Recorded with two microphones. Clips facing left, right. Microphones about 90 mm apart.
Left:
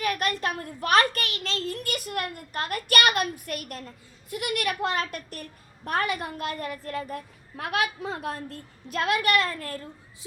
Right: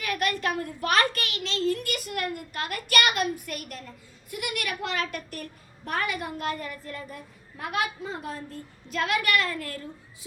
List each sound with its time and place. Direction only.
0.0 s a sound: 35° left (ahead or behind)
2.3 s a woman's voice: 40° left (ahead or behind)
6.6 s a woman's voice: 55° left (ahead or behind); by 8.5 s 70° left (ahead or behind)
8.9 s a woman's voice: 40° left (ahead or behind)